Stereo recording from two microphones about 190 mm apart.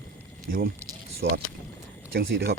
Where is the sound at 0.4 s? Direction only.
50° right (ahead or behind).